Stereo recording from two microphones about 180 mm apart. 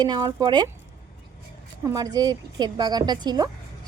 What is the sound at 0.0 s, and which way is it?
Speech, 20° right (ahead or behind).